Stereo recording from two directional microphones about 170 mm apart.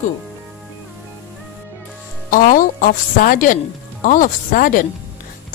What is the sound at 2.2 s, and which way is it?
A woman's voice, 55° left (ahead or behind).